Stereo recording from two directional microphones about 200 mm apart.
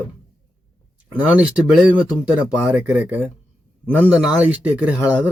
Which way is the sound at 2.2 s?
5° right (ahead or behind).